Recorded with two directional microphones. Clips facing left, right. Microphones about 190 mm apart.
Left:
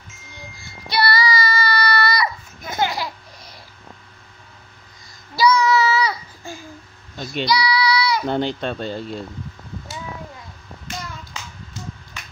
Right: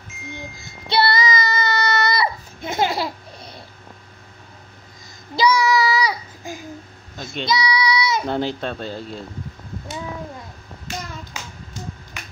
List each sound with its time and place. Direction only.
0.8 s child singing: 25° right (ahead or behind)
5.3 s child singing: 15° right (ahead or behind)
8.3 s speech: centre (ahead or behind)